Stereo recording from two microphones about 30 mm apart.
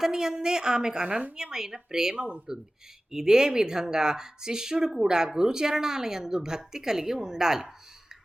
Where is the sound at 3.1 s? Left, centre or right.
Centre.